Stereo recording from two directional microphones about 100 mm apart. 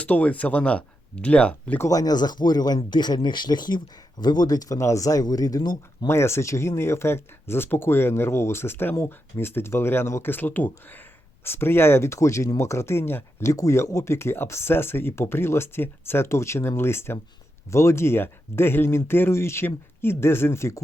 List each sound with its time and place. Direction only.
0.0 s speech: 15° left (ahead or behind)
1.9 s speech: 40° left (ahead or behind)
6.1 s speech: 25° left (ahead or behind)